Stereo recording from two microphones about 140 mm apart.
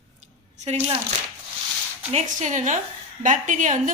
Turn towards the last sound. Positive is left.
turn(degrees=-65)  # may be behind; listen again after turning